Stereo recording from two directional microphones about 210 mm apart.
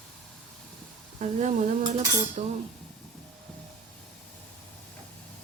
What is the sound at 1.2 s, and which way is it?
Stir, 35° right (ahead or behind).